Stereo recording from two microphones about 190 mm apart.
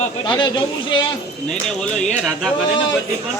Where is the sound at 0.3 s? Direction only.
25° left (ahead or behind).